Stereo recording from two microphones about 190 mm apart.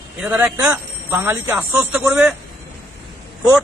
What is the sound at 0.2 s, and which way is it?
Speech, 5° right (ahead or behind).